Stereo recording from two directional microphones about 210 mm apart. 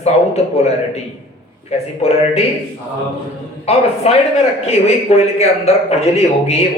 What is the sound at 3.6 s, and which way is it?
Speech, 30° left (ahead or behind).